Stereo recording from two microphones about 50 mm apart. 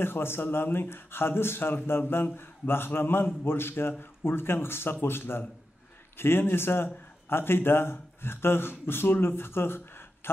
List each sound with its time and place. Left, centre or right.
0.0 s speech: left